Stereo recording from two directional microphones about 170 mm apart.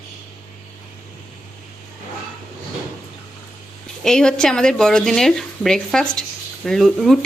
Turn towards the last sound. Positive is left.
turn(degrees=0)  # may be behind; listen again after turning